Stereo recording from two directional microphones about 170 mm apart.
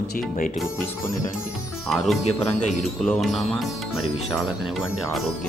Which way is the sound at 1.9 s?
Centre (ahead or behind).